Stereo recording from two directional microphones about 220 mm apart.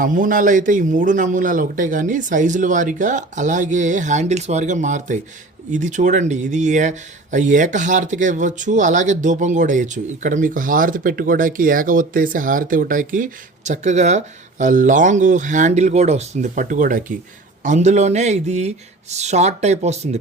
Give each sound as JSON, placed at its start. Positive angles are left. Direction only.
{"t": 0.0, "sound": "speech", "side_deg": -35}